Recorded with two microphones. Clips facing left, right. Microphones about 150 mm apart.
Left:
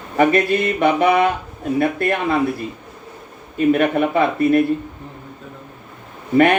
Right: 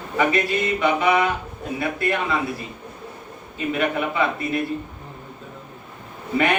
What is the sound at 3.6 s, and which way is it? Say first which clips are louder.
Speech: left 8 dB; 50° left (ahead or behind).